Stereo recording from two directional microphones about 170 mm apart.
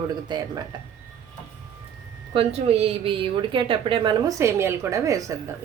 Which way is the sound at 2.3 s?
35° right (ahead or behind).